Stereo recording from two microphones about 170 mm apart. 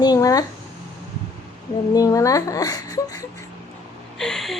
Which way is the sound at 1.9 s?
20° left (ahead or behind).